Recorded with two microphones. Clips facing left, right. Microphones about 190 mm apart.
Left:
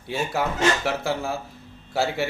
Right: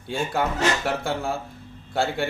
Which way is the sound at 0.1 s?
5° left (ahead or behind).